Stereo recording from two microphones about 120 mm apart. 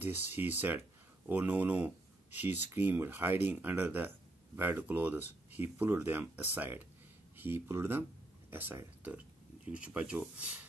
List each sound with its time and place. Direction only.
0.0 s speech: 15° right (ahead or behind)